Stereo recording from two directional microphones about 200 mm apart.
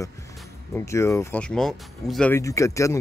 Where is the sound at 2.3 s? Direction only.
15° left (ahead or behind).